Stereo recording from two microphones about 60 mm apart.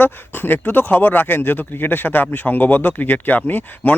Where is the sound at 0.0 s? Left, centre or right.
Left.